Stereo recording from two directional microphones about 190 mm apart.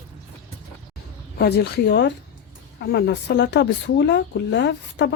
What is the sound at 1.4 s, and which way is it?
Speech, 60° left (ahead or behind).